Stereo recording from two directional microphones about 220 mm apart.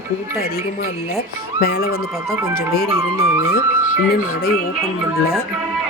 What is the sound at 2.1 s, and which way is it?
Speech, 15° right (ahead or behind).